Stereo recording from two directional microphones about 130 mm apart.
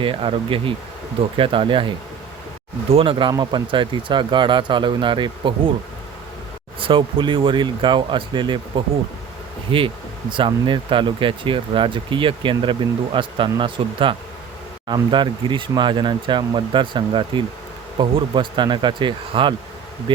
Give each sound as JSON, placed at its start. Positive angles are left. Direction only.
{"t": 0.0, "sound": "speech", "side_deg": -40}
{"t": 2.9, "sound": "speech", "side_deg": -45}
{"t": 6.7, "sound": "speech", "side_deg": -40}